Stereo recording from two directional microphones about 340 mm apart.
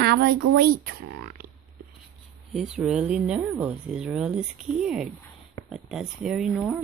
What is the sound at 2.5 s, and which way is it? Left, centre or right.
Speech, centre.